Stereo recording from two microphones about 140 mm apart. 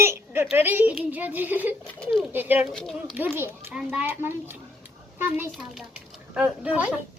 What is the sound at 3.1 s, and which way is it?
Speech, 15° right (ahead or behind).